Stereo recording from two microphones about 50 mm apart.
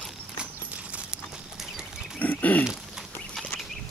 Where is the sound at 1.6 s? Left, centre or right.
Centre.